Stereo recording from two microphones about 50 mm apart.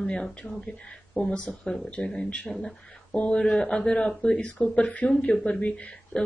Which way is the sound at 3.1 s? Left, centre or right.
Left.